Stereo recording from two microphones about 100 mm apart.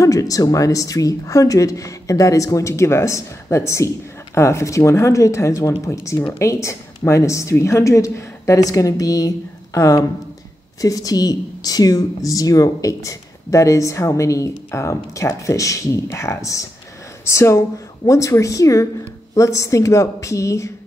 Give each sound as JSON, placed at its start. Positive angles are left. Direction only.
{"t": 0.0, "sound": "speech", "side_deg": 35}